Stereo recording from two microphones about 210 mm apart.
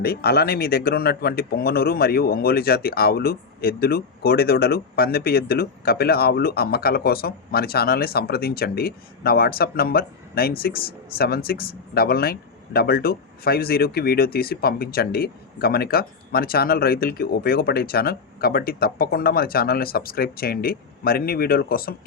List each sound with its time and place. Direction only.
0.0 s speech: 50° left (ahead or behind)